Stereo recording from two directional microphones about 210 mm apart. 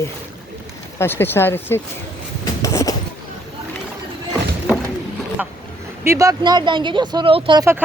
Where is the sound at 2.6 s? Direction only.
15° left (ahead or behind).